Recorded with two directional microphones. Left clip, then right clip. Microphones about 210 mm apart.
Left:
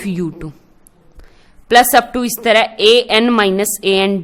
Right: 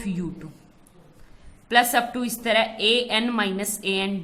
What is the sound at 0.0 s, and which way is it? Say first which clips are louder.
Speech: left 10 dB; 45° left (ahead or behind).